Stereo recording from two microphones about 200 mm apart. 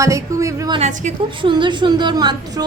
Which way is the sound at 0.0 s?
15° right (ahead or behind).